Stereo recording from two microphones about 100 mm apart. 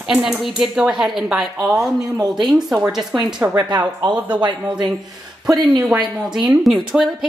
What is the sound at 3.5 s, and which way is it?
Speech, 45° right (ahead or behind).